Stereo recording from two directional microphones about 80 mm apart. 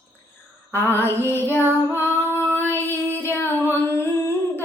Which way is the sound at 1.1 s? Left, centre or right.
Left.